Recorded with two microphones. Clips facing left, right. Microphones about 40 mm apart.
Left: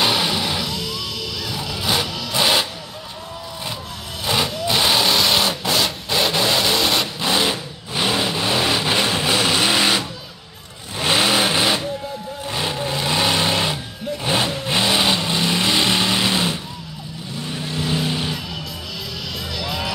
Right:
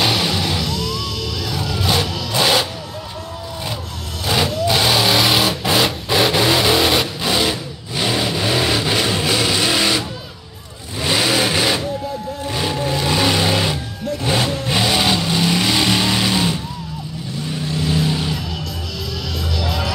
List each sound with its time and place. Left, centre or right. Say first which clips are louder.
0.0 s music: right 1 dB; centre
4.2 s vehicle: right 3 dB; centre
5.7 s vehicle: right 4 dB; centre
7.2 s sewing machine: right 1 dB; centre
8.1 s vehicle: right 2 dB; centre; by 11.3 s left
11.3 s vehicle: right 1 dB; centre
19.5 s music: right 3 dB; centre